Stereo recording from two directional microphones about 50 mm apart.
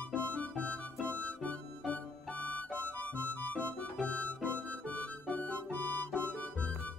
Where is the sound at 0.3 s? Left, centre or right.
Left.